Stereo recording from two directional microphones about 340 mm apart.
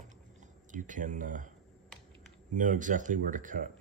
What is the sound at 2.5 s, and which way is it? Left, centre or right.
Speech, right.